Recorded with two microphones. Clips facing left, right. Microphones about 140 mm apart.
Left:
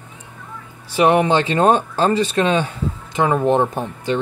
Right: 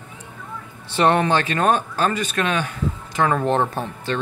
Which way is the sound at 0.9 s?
10° left (ahead or behind).